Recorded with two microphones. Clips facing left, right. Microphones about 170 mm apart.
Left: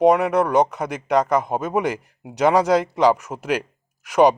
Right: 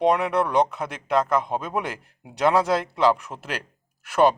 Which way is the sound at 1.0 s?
15° left (ahead or behind).